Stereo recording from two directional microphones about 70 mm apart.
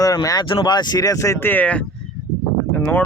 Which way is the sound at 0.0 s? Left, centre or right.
Left.